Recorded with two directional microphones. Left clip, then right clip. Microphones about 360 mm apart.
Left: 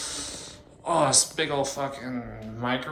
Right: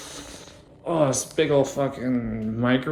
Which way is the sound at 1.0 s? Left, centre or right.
Right.